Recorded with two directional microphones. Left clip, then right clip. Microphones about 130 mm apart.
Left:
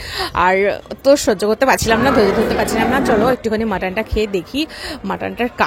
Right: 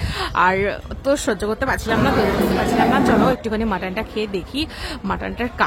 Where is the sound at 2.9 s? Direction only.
35° left (ahead or behind).